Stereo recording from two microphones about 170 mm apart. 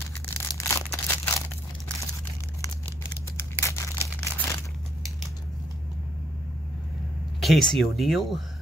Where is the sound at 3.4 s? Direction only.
15° left (ahead or behind).